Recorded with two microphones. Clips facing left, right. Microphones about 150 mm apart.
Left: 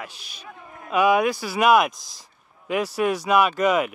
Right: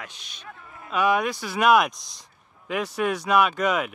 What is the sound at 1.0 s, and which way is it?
Speech, 5° left (ahead or behind).